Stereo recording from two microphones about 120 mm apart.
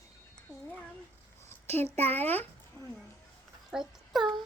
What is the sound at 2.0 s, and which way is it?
Speech, 15° left (ahead or behind).